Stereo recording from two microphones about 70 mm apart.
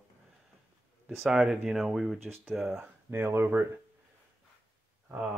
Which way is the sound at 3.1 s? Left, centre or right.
Right.